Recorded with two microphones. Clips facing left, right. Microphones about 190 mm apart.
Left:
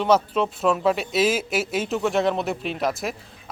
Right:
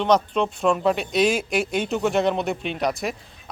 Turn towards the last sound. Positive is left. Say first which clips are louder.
# right 1 dB
turn(degrees=0)  # may be behind; listen again after turning